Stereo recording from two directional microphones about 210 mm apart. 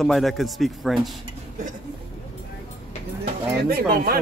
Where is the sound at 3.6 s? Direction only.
45° right (ahead or behind).